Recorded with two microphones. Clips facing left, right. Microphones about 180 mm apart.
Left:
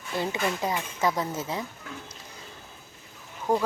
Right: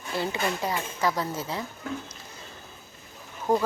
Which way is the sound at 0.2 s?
20° left (ahead or behind).